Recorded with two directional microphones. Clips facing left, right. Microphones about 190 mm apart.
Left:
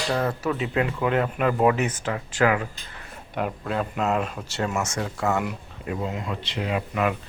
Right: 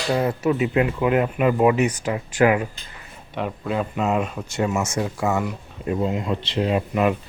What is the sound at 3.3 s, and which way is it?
Speech, centre (ahead or behind).